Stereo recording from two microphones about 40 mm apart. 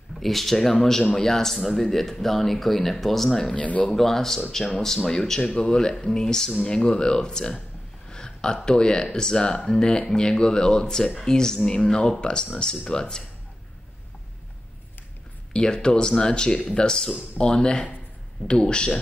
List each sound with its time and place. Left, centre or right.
0.2 s speech: centre
3.5 s speech: left
3.9 s speech: centre
8.1 s a sound: centre
8.6 s speech: centre
15.5 s speech: left